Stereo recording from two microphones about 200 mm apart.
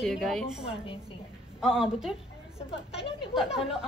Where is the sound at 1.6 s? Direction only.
5° right (ahead or behind).